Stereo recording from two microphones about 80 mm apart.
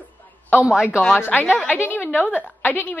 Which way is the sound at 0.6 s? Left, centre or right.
Centre.